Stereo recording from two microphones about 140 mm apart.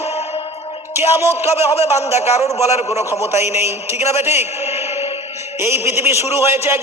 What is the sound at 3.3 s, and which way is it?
A man's voice, 20° right (ahead or behind).